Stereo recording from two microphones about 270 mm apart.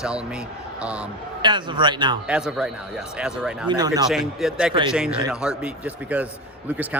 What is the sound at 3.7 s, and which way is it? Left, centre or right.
Speech, centre.